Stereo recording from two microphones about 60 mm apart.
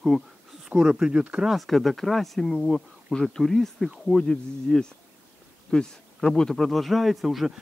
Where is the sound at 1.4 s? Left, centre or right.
Centre.